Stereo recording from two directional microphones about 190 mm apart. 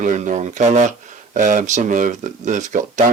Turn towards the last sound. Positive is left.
turn(degrees=-40)  # may be behind; listen again after turning